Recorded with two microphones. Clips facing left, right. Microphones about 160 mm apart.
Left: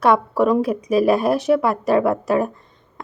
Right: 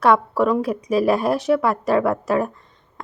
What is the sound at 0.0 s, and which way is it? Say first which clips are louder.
Speech: left 1 dB; 15° left (ahead or behind).